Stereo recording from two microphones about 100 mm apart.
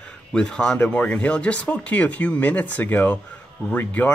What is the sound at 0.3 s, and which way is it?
Speech, 10° left (ahead or behind).